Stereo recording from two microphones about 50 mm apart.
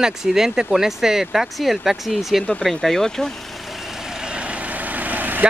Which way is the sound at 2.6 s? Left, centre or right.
Centre.